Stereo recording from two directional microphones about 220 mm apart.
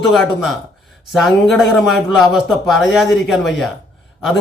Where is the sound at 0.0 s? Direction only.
Centre (ahead or behind).